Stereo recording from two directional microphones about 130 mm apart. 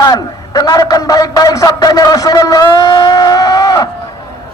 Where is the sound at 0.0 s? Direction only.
30° left (ahead or behind).